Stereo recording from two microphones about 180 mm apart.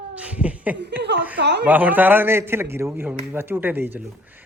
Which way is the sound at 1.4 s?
70° right (ahead or behind).